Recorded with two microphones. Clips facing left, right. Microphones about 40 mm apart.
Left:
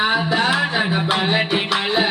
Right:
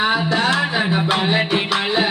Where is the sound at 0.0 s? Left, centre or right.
Centre.